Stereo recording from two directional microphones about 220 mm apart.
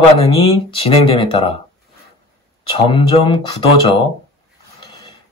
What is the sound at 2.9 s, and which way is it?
Speech, 20° left (ahead or behind).